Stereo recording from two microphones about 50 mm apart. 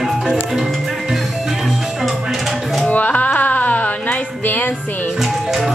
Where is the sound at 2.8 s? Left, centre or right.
Left.